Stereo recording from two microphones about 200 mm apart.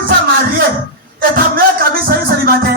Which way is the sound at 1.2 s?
45° right (ahead or behind).